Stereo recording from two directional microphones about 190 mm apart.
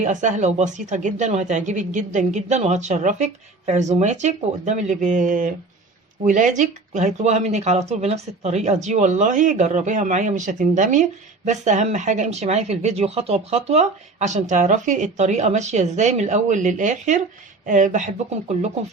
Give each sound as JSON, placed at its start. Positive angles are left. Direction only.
{"t": 0.0, "sound": "speech", "side_deg": -40}